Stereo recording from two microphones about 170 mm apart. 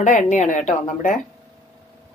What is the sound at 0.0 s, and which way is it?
Speech, 45° left (ahead or behind).